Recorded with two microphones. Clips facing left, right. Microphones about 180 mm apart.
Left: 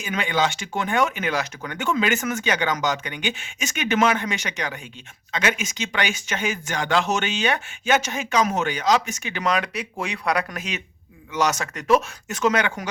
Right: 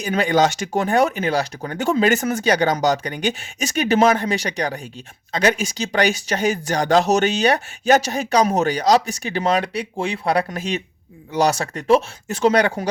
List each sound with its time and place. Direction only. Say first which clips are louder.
0.0 s speech: right 6 dB; 40° right (ahead or behind)